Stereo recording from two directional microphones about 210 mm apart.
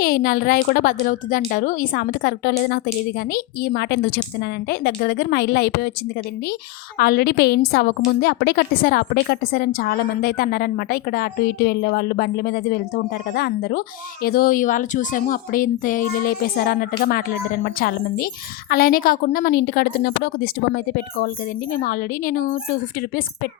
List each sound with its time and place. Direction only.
0.0 s a woman's voice: 45° left (ahead or behind)
7.0 s a woman's voice: 45° left (ahead or behind)